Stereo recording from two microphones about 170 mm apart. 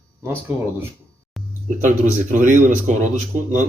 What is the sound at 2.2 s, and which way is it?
Speech, 45° right (ahead or behind).